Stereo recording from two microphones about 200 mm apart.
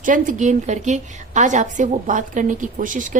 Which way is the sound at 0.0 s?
40° right (ahead or behind).